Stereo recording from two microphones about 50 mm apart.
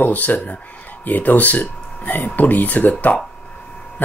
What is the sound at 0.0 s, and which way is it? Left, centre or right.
Speech, left.